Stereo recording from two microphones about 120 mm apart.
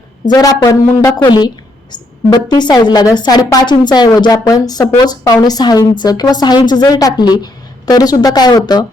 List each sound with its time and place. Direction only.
0.3 s speech: 30° left (ahead or behind)
1.2 s speech: 40° left (ahead or behind)
2.5 s speech: 35° left (ahead or behind)